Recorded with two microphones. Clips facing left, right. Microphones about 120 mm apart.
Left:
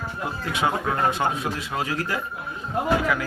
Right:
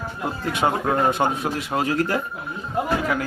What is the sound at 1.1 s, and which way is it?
Speech, 50° right (ahead or behind).